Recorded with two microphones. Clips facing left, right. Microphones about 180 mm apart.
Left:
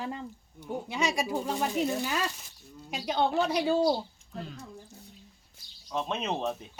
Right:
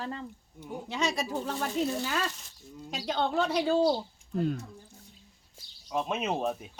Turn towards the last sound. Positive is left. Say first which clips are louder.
# right 1 dB
turn(degrees=-10)  # may be behind; listen again after turning